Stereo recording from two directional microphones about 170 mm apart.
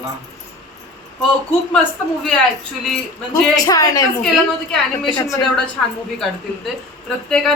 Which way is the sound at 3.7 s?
20° left (ahead or behind).